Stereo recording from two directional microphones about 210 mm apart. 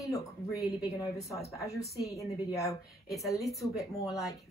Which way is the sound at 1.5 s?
15° left (ahead or behind).